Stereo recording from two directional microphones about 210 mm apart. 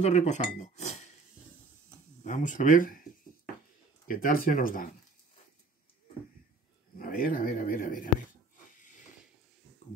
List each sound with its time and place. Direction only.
0.0 s speech: 30° left (ahead or behind)
2.2 s speech: 35° left (ahead or behind)
4.1 s speech: 40° left (ahead or behind)
7.0 s speech: 45° left (ahead or behind)